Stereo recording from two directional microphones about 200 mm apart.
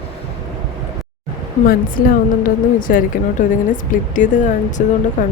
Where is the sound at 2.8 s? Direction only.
40° left (ahead or behind).